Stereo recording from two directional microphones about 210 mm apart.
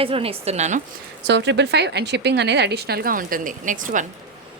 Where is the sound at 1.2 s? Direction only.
55° right (ahead or behind); by 4.0 s 40° right (ahead or behind).